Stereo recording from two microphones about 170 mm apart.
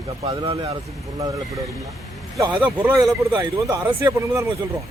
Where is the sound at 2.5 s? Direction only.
10° right (ahead or behind).